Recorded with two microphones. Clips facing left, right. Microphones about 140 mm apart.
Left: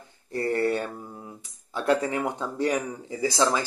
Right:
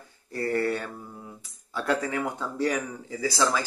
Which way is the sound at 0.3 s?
20° left (ahead or behind).